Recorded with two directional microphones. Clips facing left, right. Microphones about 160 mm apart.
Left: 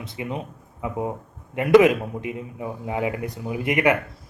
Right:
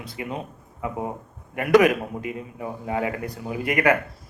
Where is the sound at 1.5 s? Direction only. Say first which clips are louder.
Left 2 dB; 20° left (ahead or behind).